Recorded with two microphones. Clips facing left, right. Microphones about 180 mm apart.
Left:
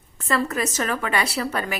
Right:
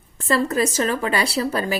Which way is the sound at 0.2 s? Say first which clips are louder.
Right 4 dB; 30° right (ahead or behind).